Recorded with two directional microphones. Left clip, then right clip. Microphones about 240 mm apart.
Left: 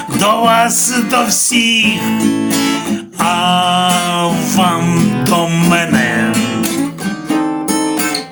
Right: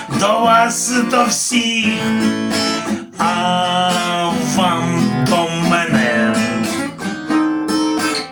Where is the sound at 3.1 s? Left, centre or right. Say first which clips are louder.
Left 3 dB; left.